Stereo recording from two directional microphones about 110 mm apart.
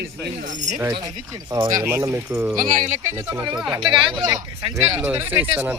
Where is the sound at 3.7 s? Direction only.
45° right (ahead or behind).